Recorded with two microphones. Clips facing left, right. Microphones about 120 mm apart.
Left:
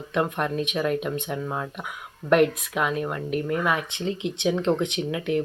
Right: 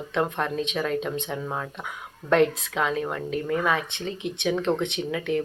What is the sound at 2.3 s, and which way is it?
Speech, 10° left (ahead or behind).